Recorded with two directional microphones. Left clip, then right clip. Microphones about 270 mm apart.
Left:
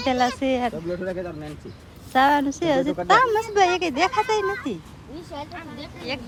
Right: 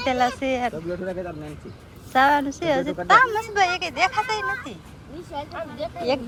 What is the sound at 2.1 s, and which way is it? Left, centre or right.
Speech, centre.